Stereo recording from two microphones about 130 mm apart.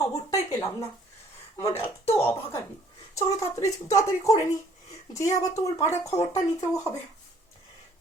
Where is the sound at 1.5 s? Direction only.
20° left (ahead or behind).